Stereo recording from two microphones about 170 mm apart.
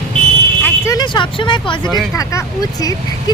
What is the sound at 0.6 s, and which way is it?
Speech, 20° left (ahead or behind).